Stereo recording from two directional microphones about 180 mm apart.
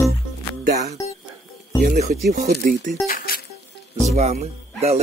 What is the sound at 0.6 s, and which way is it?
Speech, 60° right (ahead or behind).